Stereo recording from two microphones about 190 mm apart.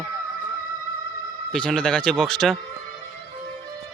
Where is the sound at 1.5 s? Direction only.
5° left (ahead or behind).